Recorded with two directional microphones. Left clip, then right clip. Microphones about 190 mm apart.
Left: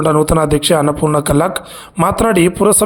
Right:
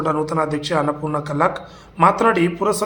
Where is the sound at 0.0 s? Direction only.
45° left (ahead or behind).